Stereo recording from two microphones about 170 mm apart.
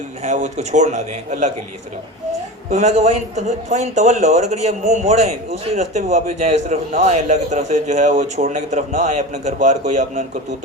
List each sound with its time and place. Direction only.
0.2 s a man's voice: 45° right (ahead or behind)
2.7 s a man's voice: 45° right (ahead or behind)